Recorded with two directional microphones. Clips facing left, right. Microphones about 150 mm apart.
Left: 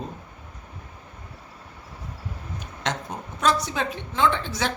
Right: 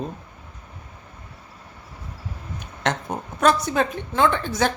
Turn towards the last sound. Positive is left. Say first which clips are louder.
# right 3 dB
turn(degrees=-50)  # may be behind; listen again after turning